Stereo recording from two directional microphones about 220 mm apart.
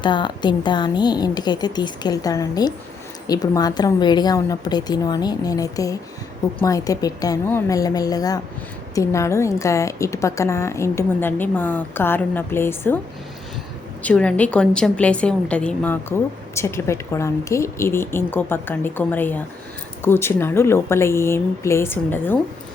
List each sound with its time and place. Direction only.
0.0 s a woman's voice: 20° left (ahead or behind)
14.0 s a woman's voice: 5° left (ahead or behind)